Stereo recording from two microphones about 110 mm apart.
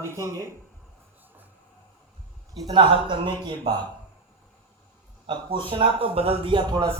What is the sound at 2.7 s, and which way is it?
Speech, 45° right (ahead or behind).